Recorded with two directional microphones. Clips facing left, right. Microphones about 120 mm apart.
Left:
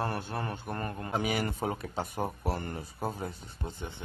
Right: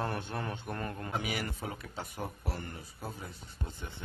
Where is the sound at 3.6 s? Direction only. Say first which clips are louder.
Left 6 dB; 30° left (ahead or behind).